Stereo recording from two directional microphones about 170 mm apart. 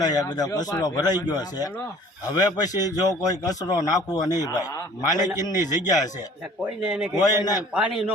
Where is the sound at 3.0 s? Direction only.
20° left (ahead or behind).